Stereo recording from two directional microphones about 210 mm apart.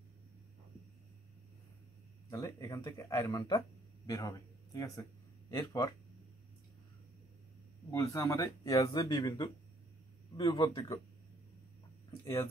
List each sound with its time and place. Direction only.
2.2 s speech: 15° left (ahead or behind)
7.9 s speech: 15° left (ahead or behind)